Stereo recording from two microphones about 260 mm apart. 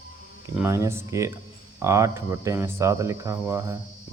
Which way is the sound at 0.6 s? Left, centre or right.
Centre.